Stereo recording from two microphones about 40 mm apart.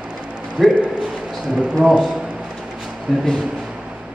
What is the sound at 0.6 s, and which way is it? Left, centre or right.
A man's voice, centre.